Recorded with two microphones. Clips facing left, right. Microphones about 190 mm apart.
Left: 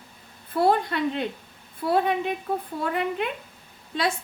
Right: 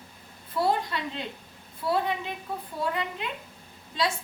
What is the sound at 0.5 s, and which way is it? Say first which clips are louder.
A woman's voice: left 5 dB; 55° left (ahead or behind).